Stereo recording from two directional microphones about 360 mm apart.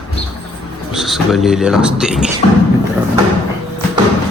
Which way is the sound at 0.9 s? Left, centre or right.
Centre.